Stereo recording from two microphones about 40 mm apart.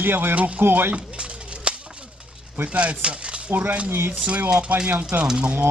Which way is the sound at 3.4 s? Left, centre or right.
Right.